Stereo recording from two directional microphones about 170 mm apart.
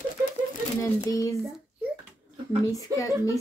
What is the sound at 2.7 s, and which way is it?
Speech, 20° left (ahead or behind).